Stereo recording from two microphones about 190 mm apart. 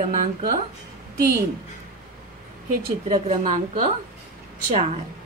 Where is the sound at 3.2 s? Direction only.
35° right (ahead or behind).